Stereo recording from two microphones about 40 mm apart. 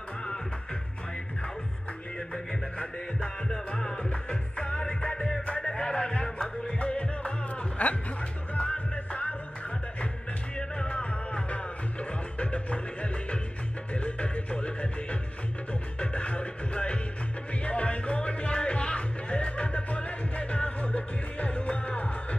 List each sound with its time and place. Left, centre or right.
2.8 s music: left
10.8 s music: left